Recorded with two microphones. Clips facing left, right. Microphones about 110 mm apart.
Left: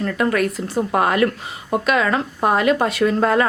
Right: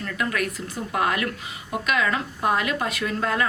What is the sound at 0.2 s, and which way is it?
A woman's voice, 35° left (ahead or behind).